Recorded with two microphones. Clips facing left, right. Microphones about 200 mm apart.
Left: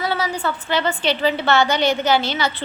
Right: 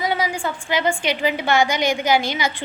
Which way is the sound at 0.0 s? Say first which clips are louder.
Even; 15° right (ahead or behind).